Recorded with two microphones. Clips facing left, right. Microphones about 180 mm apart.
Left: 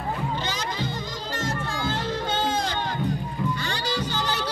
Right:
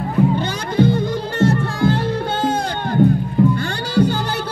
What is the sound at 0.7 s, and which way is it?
Music, 60° right (ahead or behind).